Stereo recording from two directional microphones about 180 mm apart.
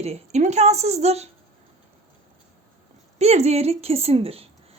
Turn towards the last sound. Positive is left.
turn(degrees=-35)  # may be behind; listen again after turning